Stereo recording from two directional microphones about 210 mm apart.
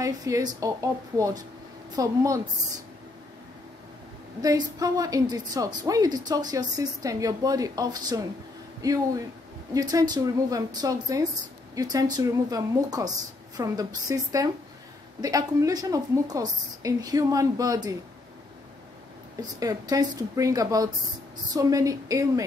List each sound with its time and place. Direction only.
0.0 s a woman's voice: 15° right (ahead or behind)
4.4 s a woman's voice: 15° right (ahead or behind)
19.6 s a woman's voice: 15° right (ahead or behind)